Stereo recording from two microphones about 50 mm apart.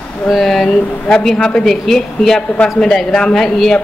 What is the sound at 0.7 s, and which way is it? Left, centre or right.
A woman's voice, centre.